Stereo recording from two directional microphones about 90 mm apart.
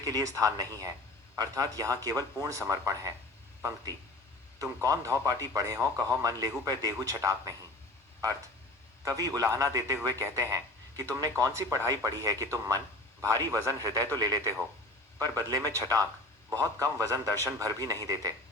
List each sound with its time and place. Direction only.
0.0 s speech: 40° right (ahead or behind)
4.6 s speech: 35° right (ahead or behind)
9.0 s speech: 45° right (ahead or behind)